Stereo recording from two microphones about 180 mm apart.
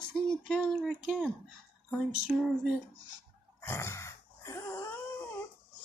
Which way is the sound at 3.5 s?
15° left (ahead or behind).